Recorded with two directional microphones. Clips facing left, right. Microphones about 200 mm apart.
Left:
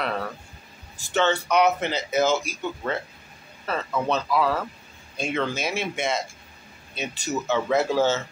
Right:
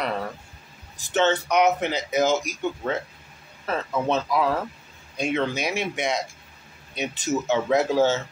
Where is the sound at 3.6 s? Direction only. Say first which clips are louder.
Right 1 dB; 20° right (ahead or behind).